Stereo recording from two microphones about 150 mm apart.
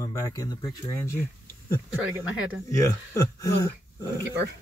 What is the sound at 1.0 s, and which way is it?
Speech, 15° left (ahead or behind).